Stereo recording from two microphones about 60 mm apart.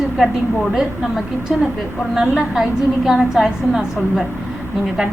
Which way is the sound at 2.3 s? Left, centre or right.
Centre.